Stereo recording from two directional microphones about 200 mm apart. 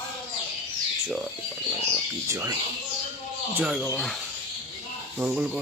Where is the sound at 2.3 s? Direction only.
15° right (ahead or behind).